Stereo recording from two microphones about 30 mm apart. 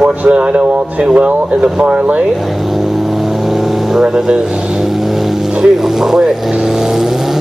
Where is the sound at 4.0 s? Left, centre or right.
Right.